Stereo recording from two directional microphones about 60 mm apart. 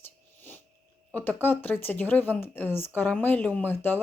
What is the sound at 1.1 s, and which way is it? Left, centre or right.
Speech, left.